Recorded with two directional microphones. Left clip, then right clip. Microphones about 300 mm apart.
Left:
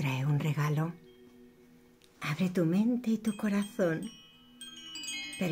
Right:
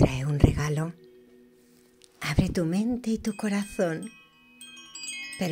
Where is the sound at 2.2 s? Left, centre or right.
Right.